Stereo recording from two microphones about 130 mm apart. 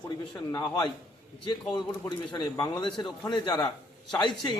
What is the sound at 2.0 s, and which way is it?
A man's voice, 35° left (ahead or behind).